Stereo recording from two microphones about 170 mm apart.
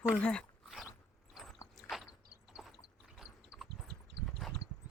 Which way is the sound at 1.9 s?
5° right (ahead or behind).